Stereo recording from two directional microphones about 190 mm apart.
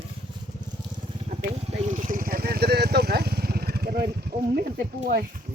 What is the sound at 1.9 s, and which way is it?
Vehicle, 45° right (ahead or behind).